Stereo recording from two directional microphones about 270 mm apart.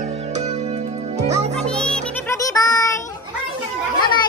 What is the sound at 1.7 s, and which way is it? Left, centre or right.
Music, centre.